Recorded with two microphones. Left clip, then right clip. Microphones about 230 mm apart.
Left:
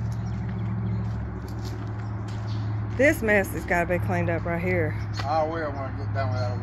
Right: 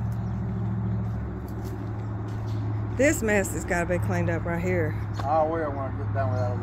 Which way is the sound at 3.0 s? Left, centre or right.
Centre.